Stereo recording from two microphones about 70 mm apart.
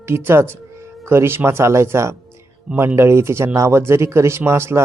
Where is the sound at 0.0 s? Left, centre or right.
Right.